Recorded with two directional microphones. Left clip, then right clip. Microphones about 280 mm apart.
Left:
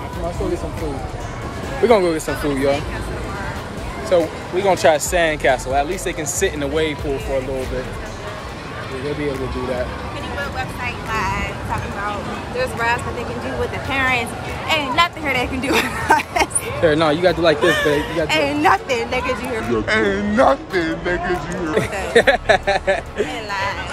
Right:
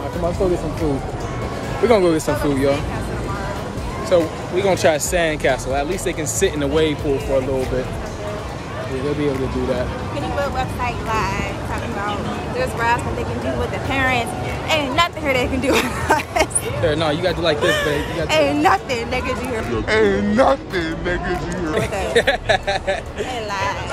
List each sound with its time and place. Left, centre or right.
1.9 s speech: centre
4.1 s speech: centre
10.4 s speech: centre
12.5 s speech: centre
16.8 s speech: left
18.3 s speech: centre
22.1 s speech: centre